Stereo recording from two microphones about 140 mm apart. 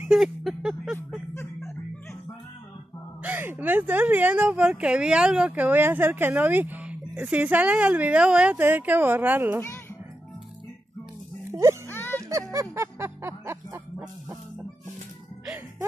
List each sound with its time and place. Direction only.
0.0 s a sound: centre (ahead or behind)
3.2 s speech: 10° right (ahead or behind)
11.9 s music: 15° left (ahead or behind)
12.3 s music: 25° right (ahead or behind)